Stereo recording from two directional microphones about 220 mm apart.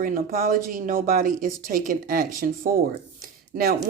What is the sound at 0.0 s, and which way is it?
A woman's voice, 40° right (ahead or behind).